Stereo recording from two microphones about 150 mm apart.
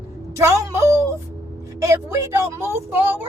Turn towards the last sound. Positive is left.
turn(degrees=-15)  # may be behind; listen again after turning